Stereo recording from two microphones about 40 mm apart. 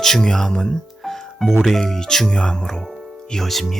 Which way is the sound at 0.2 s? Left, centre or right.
Centre.